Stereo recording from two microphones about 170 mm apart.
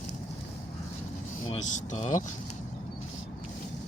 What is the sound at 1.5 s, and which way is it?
Speech, 40° left (ahead or behind).